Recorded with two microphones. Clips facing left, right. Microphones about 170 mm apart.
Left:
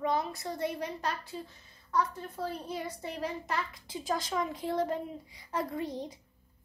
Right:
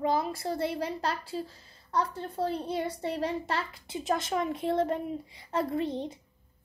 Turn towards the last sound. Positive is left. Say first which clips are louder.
# right 5 dB
turn(degrees=-25)  # may be behind; listen again after turning